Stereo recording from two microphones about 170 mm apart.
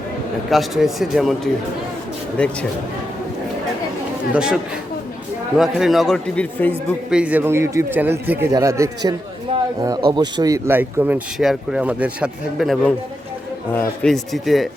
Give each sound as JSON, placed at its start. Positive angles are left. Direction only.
{"t": 0.5, "sound": "a man's voice", "side_deg": 0}
{"t": 2.4, "sound": "speech", "side_deg": 5}
{"t": 4.4, "sound": "a man's voice", "side_deg": -5}
{"t": 7.1, "sound": "speech", "side_deg": -5}
{"t": 9.5, "sound": "a sound", "side_deg": -30}
{"t": 9.8, "sound": "speech", "side_deg": -25}
{"t": 13.7, "sound": "a man's voice", "side_deg": 5}